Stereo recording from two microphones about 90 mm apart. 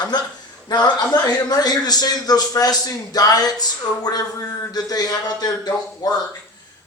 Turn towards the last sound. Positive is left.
turn(degrees=50)  # may be behind; listen again after turning